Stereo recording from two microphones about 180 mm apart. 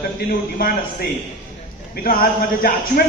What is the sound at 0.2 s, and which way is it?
Speech, 55° left (ahead or behind).